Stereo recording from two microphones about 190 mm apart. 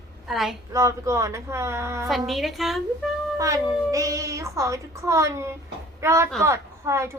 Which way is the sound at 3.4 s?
15° right (ahead or behind).